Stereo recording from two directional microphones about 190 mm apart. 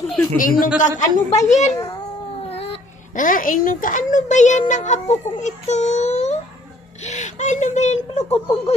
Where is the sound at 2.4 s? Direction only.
30° left (ahead or behind).